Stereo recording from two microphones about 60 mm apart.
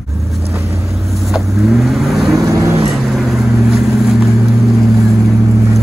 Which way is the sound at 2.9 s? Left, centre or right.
Centre.